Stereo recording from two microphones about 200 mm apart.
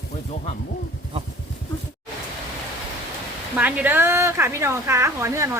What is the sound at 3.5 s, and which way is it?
A woman's voice, 10° right (ahead or behind).